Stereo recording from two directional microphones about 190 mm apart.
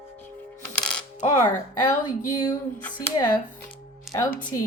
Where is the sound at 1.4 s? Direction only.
20° left (ahead or behind).